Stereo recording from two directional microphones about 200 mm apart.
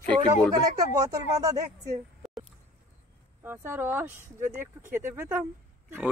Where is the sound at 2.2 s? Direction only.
Centre (ahead or behind).